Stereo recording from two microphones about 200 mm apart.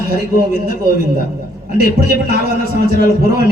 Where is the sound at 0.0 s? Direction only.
50° right (ahead or behind).